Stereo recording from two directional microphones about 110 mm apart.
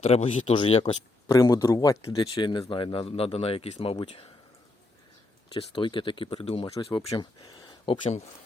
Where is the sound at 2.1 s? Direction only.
45° left (ahead or behind); by 4.3 s 65° left (ahead or behind).